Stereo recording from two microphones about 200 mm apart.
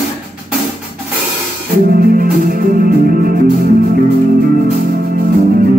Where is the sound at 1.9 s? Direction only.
45° right (ahead or behind).